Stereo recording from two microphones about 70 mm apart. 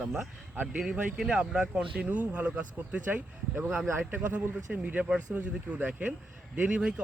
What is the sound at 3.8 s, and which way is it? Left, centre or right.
Speech, right.